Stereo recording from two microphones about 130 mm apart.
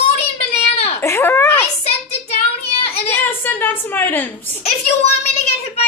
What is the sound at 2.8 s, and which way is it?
Child singing, 50° left (ahead or behind).